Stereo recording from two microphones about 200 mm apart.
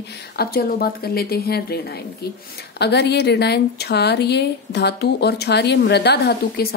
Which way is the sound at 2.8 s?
55° left (ahead or behind).